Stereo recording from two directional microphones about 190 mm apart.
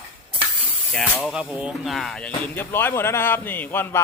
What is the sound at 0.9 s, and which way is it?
Speech, centre (ahead or behind).